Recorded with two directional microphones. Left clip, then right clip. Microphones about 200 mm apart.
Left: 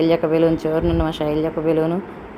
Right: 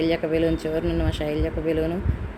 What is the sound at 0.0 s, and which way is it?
Speech, 5° left (ahead or behind).